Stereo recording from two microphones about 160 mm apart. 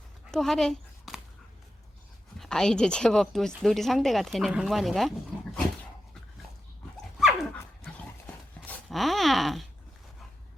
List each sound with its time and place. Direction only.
0.3 s a sound: centre (ahead or behind)
2.4 s a woman's voice: 5° left (ahead or behind)
6.9 s dog: centre (ahead or behind)
8.6 s groan: centre (ahead or behind)